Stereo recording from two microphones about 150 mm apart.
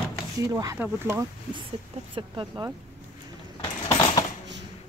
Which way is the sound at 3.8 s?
20° left (ahead or behind).